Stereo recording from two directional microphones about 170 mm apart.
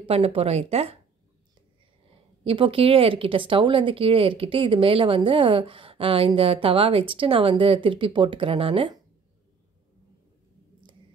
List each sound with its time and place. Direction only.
0.0 s speech: 35° right (ahead or behind)
2.4 s speech: 30° right (ahead or behind)